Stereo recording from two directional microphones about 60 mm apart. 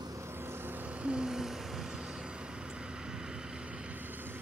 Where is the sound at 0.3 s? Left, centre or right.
Right.